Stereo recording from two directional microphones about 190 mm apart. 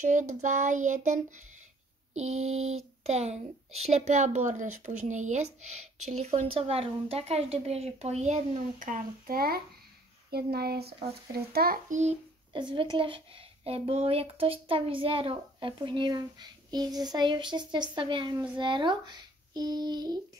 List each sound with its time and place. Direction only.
0.0 s a child's voice: 40° right (ahead or behind)
12.5 s speech: 25° right (ahead or behind)